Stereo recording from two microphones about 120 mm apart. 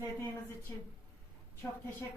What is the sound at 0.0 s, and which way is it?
Speech, 20° left (ahead or behind).